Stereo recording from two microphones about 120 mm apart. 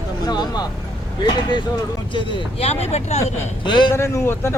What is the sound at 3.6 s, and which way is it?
Speech, 40° left (ahead or behind).